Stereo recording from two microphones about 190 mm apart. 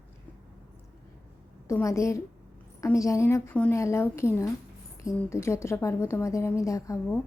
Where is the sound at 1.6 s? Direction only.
15° left (ahead or behind).